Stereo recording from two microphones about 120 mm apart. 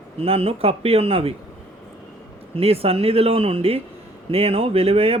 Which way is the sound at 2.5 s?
55° right (ahead or behind).